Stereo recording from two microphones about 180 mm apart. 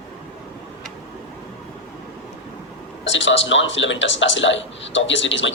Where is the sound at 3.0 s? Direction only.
90° left.